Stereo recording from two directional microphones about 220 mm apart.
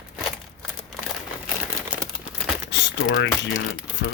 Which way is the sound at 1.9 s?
5° right (ahead or behind).